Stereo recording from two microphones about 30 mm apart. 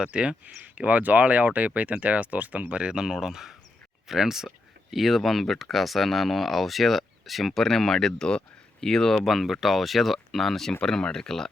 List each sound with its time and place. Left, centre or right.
0.0 s speech: right
0.4 s speech: right
3.0 s speech: centre
9.2 s speech: centre
10.8 s speech: left